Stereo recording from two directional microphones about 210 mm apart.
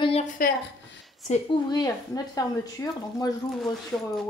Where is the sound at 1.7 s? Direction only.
15° left (ahead or behind).